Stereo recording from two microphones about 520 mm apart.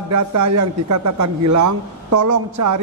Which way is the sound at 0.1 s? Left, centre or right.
Right.